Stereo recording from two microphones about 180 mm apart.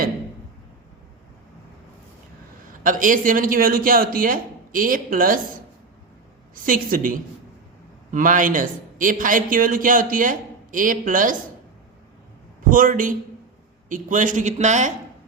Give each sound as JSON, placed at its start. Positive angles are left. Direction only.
{"t": 2.8, "sound": "a man's voice", "side_deg": -45}
{"t": 6.5, "sound": "a man's voice", "side_deg": -50}
{"t": 12.7, "sound": "a man's voice", "side_deg": -50}